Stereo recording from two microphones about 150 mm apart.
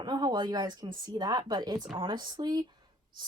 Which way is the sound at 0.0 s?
30° right (ahead or behind).